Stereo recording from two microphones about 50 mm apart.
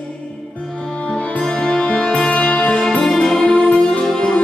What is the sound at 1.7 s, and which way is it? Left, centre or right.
Music, centre.